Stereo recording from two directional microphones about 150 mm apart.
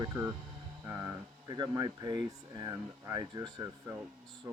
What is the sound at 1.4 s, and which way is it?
Speech, 25° right (ahead or behind).